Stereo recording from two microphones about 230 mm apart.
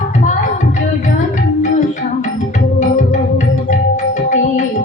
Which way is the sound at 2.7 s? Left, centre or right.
Left.